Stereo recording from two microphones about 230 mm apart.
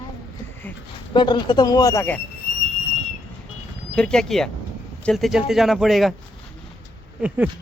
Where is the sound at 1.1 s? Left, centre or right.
Centre.